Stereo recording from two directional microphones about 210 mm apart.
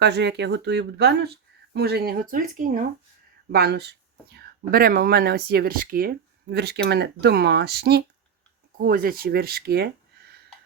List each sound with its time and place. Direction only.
0.0 s speech: 55° right (ahead or behind)